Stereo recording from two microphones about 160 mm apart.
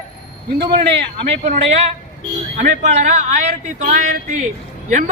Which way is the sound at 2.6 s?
50° right (ahead or behind).